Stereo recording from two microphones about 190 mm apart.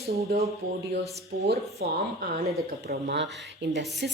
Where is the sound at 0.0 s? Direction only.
35° right (ahead or behind).